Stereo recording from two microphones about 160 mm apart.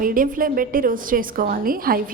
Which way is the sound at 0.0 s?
60° right (ahead or behind).